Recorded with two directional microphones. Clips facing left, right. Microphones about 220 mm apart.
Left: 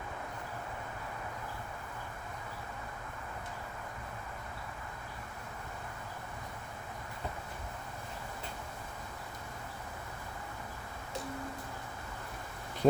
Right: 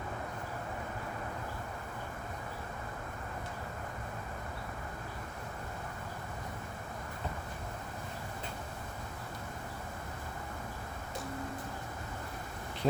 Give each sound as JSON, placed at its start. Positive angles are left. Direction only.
{"t": 12.8, "sound": "bee", "side_deg": 45}